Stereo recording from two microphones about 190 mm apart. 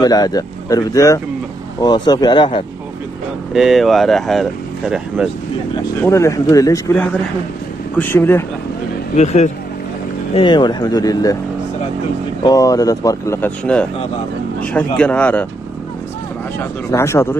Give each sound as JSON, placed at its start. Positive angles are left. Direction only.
{"t": 0.0, "sound": "speech", "side_deg": 20}
{"t": 3.5, "sound": "speech", "side_deg": 0}
{"t": 5.8, "sound": "speech", "side_deg": 15}
{"t": 9.1, "sound": "speech", "side_deg": 35}
{"t": 10.3, "sound": "speech", "side_deg": 25}
{"t": 12.4, "sound": "speech", "side_deg": 20}
{"t": 16.5, "sound": "speech", "side_deg": 15}